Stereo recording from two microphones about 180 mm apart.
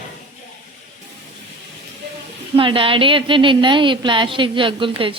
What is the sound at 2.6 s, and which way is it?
A woman's voice, 30° right (ahead or behind).